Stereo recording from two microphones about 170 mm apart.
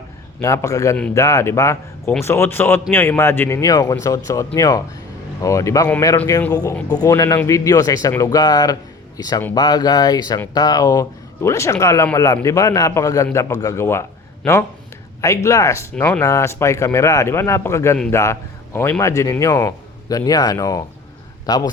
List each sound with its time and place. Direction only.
0.4 s speech: 20° left (ahead or behind)
15.2 s a man's voice: 20° left (ahead or behind)